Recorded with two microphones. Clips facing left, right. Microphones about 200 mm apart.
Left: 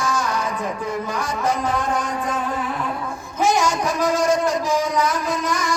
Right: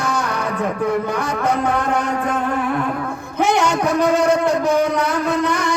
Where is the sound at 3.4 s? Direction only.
65° right (ahead or behind).